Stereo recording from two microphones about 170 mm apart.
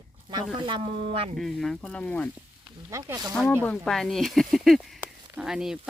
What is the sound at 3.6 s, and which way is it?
Speech, 5° left (ahead or behind).